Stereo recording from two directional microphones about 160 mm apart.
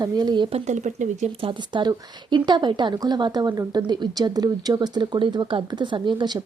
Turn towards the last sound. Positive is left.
turn(degrees=-30)  # may be behind; listen again after turning